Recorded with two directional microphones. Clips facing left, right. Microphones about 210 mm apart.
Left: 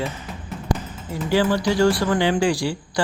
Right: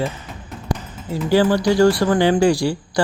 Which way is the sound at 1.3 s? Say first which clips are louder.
Right 4 dB; 40° right (ahead or behind).